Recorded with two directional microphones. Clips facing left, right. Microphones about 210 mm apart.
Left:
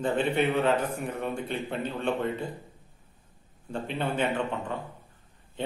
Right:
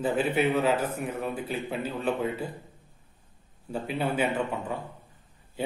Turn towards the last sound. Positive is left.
turn(degrees=-10)  # may be behind; listen again after turning